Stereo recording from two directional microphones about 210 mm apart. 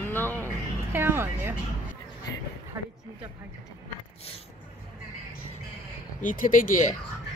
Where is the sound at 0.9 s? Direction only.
10° right (ahead or behind).